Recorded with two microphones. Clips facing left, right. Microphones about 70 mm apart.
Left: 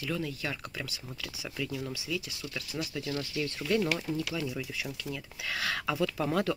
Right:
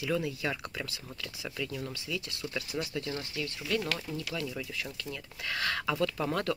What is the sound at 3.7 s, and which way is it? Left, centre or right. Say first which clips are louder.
Speech: left 4 dB; left.